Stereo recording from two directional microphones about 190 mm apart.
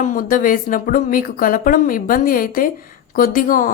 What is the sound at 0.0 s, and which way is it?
A woman's voice, 45° left (ahead or behind).